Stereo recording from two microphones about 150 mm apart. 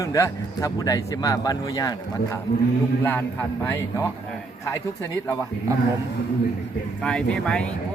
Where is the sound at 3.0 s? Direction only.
15° left (ahead or behind).